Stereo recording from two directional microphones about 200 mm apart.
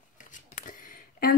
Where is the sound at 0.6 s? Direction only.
45° left (ahead or behind).